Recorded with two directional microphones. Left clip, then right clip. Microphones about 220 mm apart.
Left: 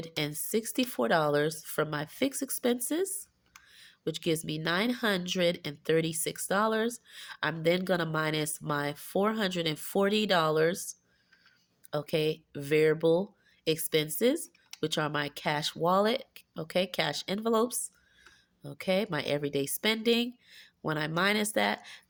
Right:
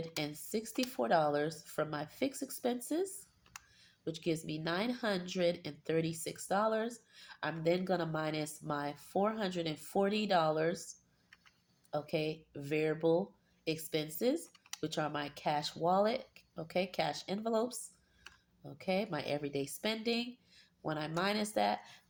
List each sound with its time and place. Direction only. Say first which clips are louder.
0.0 s speech: left 5 dB; 45° left (ahead or behind)
11.9 s speech: left 7 dB; 45° left (ahead or behind)